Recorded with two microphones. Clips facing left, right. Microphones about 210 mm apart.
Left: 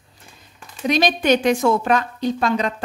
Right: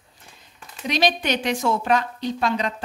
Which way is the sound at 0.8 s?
45° left (ahead or behind).